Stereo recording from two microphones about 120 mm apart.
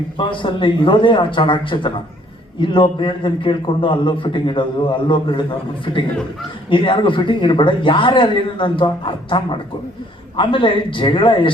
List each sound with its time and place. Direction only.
0.2 s a man's voice: 45° left (ahead or behind)